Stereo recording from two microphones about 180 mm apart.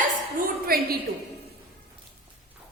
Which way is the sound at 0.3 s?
55° right (ahead or behind).